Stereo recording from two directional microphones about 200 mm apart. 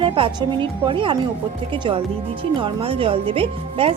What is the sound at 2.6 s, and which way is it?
A woman's voice, 25° right (ahead or behind).